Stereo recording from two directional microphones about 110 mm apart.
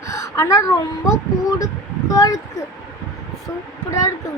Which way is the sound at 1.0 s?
35° left (ahead or behind).